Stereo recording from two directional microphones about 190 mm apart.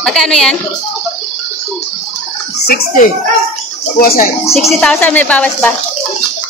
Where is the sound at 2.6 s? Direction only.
55° left (ahead or behind).